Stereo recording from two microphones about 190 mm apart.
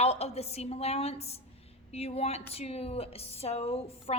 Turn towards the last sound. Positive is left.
turn(degrees=30)  # may be behind; listen again after turning